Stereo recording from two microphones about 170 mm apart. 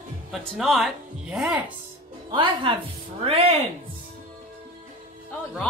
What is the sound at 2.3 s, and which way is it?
Speech, 30° right (ahead or behind).